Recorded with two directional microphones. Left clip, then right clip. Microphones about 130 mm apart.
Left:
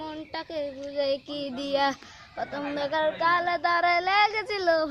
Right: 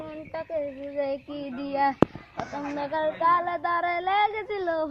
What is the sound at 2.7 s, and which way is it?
Child singing, 25° left (ahead or behind).